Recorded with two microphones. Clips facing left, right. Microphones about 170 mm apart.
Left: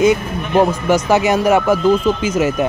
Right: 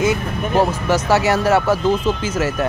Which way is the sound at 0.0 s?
20° left (ahead or behind).